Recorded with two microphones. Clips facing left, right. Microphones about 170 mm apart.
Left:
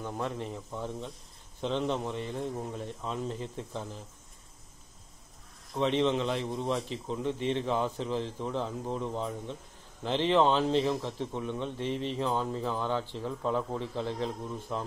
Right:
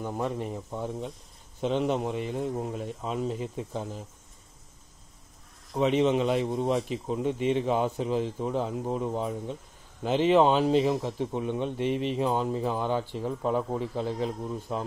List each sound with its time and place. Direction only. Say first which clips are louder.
0.0 s a man's voice: right 4 dB; 10° right (ahead or behind)
5.8 s a man's voice: right 4 dB; 15° right (ahead or behind)